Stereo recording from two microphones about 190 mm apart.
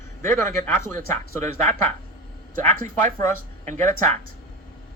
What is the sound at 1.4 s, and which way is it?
Speech, 40° right (ahead or behind).